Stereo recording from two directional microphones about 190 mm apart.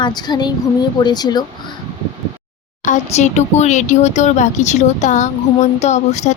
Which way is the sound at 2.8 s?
40° left (ahead or behind).